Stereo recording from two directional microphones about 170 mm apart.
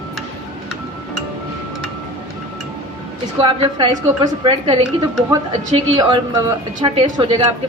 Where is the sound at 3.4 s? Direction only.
30° right (ahead or behind).